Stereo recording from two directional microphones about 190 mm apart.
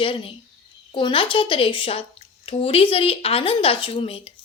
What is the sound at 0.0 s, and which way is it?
A woman's voice, 30° left (ahead or behind).